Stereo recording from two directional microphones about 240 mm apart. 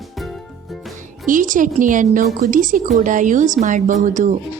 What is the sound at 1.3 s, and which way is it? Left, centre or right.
A woman's voice, right.